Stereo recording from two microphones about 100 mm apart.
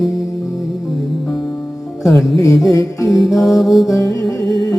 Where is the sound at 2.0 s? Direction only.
Centre (ahead or behind).